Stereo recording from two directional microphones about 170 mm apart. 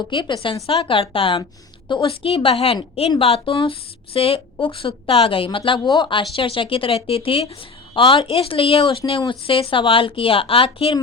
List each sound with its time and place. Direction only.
0.1 s speech: 30° left (ahead or behind)